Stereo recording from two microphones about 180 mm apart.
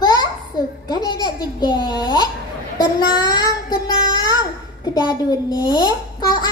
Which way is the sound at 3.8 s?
20° left (ahead or behind).